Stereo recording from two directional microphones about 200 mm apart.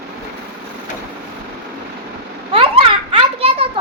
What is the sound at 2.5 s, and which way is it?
Children playing, 30° right (ahead or behind).